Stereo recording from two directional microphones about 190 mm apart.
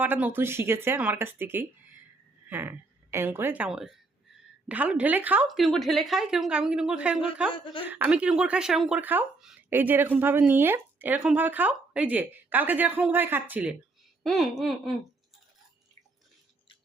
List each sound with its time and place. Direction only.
0.0 s a woman's voice: 10° right (ahead or behind)
7.5 s a woman's voice: 25° left (ahead or behind)
7.9 s a woman's voice: 10° right (ahead or behind)